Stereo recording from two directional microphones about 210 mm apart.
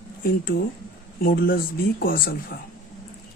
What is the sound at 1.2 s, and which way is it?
Speech, 45° left (ahead or behind).